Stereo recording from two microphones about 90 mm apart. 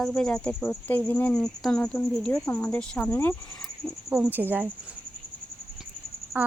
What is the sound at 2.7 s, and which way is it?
Speech, 15° left (ahead or behind).